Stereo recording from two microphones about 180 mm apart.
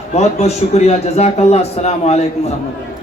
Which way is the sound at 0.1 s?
35° left (ahead or behind).